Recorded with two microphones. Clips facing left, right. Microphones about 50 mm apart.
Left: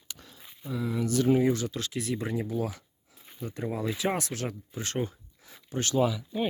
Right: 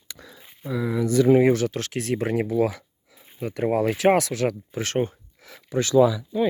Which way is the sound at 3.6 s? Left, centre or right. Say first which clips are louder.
Right 11 dB; right.